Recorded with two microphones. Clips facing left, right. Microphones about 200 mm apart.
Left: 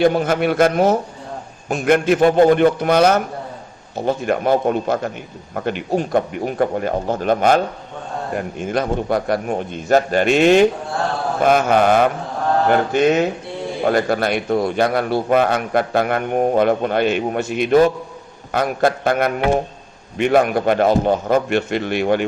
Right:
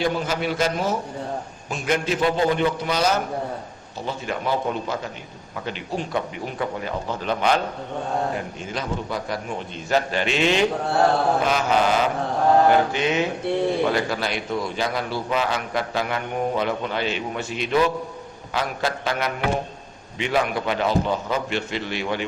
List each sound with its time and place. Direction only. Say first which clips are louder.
0.0 s a man's voice: left 8 dB; 55° left (ahead or behind)